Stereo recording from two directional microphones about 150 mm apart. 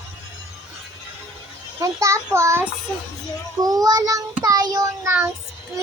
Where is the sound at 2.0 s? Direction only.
20° right (ahead or behind).